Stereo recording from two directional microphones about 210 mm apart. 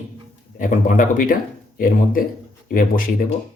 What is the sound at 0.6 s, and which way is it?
Speech, 40° left (ahead or behind).